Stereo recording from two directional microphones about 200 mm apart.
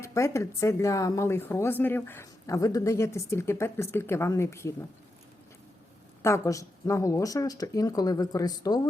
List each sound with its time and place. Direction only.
0.0 s speech: 15° left (ahead or behind)
6.2 s speech: 15° left (ahead or behind)